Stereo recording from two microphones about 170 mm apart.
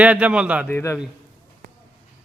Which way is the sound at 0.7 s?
15° left (ahead or behind).